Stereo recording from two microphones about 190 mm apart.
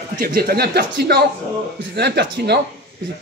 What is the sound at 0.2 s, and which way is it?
Speech, 55° right (ahead or behind).